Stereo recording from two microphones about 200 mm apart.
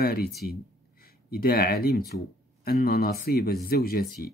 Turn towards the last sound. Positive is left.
turn(degrees=50)  # may be behind; listen again after turning